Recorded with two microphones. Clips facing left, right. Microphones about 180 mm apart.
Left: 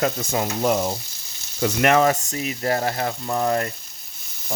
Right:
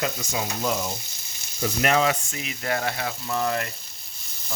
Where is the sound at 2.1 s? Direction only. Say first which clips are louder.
Left 5 dB; 40° left (ahead or behind).